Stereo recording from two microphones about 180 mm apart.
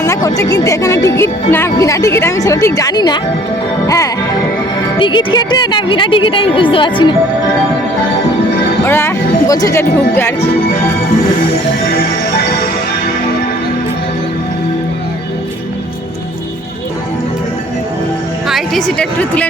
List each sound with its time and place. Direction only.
0.0 s speech: 15° left (ahead or behind)
8.9 s speech: 15° left (ahead or behind)
18.4 s a woman's voice: centre (ahead or behind)